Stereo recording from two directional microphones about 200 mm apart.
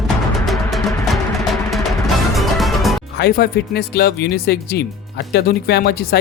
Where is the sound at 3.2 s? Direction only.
50° left (ahead or behind).